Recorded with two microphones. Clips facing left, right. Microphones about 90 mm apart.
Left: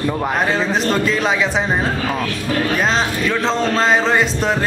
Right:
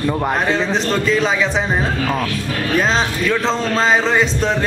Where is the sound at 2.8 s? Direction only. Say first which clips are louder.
Right 1 dB; centre (ahead or behind).